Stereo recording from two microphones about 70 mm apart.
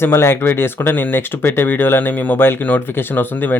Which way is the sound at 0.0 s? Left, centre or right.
Left.